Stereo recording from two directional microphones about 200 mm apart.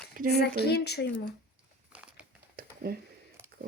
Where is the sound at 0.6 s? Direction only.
55° left (ahead or behind).